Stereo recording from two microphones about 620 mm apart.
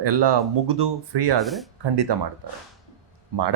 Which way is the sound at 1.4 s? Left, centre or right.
Centre.